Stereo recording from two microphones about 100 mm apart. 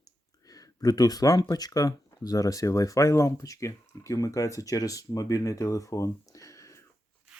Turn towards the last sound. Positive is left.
turn(degrees=30)  # may be behind; listen again after turning